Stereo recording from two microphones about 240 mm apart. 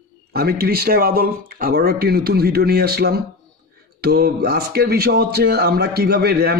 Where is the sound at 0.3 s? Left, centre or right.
Right.